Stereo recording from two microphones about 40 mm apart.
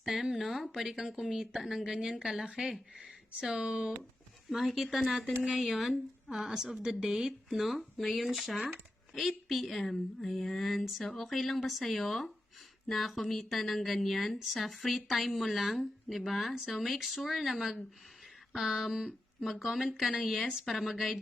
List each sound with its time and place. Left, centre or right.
0.0 s a woman's voice: centre; by 3.9 s right
4.4 s a woman's voice: centre
6.3 s speech: centre
7.6 s a woman's voice: centre
10.2 s mantra: centre
11.3 s a woman's voice: centre
19.5 s a woman's voice: centre